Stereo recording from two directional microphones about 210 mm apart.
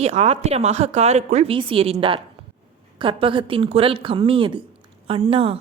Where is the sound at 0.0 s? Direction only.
30° right (ahead or behind).